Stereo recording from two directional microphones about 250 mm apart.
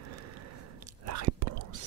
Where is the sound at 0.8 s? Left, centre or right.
Right.